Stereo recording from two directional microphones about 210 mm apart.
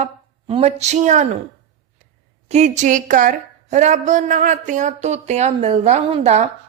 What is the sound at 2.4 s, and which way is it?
Speech, 35° right (ahead or behind).